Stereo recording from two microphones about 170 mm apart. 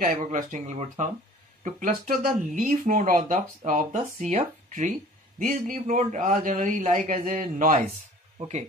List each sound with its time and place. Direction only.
0.0 s speech: 50° right (ahead or behind)